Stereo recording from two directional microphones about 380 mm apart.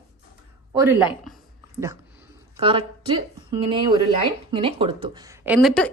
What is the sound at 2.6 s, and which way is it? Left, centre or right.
A woman's voice, centre.